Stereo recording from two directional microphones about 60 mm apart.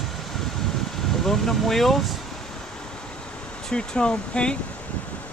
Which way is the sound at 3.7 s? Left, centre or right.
Centre.